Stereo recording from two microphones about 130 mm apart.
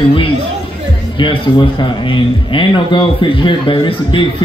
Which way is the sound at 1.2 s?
40° left (ahead or behind).